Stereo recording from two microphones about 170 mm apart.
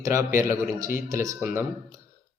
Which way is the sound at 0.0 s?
15° right (ahead or behind).